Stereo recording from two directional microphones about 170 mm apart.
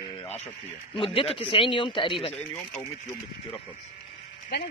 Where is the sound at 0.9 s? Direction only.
30° left (ahead or behind).